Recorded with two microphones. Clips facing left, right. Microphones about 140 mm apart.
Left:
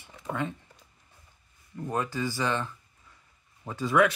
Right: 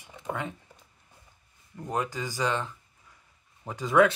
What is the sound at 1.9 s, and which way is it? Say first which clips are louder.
Speech: left 1 dB; 20° right (ahead or behind).